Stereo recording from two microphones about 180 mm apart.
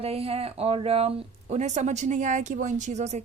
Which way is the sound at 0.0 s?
35° right (ahead or behind).